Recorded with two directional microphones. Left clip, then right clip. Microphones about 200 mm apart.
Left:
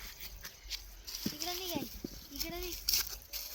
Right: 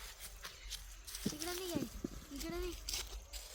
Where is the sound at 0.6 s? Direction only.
25° left (ahead or behind).